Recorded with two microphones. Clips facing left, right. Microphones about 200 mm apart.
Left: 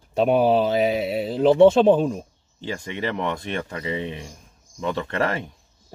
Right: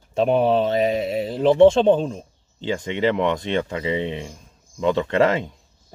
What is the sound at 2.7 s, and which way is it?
Speech, 20° right (ahead or behind).